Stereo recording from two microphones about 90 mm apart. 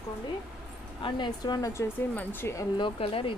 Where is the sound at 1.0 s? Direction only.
65° left (ahead or behind).